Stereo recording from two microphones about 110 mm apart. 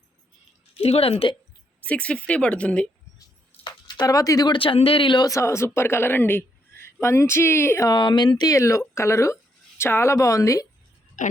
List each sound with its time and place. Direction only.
0.7 s speech: 65° left (ahead or behind)
1.8 s speech: 10° left (ahead or behind)
3.6 s a sound: 40° left (ahead or behind)
4.5 s speech: 55° left (ahead or behind)
5.3 s a woman's voice: 25° left (ahead or behind)
7.9 s a woman's voice: 45° left (ahead or behind)